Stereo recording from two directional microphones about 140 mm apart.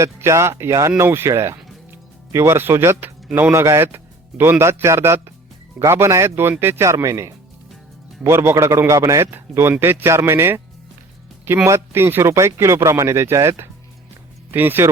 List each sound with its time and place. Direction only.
0.0 s a man's voice: 20° right (ahead or behind)